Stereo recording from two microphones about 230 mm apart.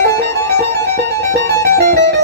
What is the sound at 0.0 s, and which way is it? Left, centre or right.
Music, centre.